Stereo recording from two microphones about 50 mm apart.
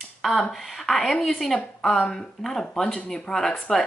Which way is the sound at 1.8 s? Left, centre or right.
Centre.